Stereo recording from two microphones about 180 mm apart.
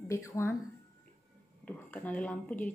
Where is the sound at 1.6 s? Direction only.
10° left (ahead or behind).